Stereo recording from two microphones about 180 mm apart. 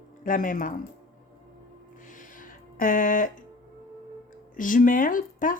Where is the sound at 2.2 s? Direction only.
50° left (ahead or behind).